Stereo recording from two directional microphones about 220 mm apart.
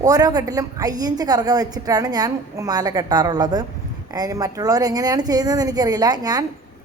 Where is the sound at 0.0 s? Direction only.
15° right (ahead or behind).